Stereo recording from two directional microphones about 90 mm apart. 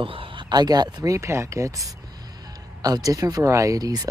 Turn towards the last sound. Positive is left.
turn(degrees=-45)  # may be behind; listen again after turning